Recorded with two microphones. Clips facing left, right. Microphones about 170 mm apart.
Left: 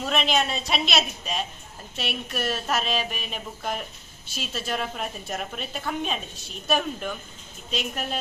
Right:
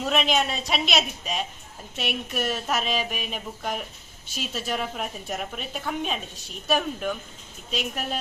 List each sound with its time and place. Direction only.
0.0 s a woman's voice: 10° right (ahead or behind)